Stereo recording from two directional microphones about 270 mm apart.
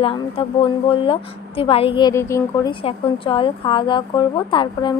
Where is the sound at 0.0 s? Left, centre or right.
Centre.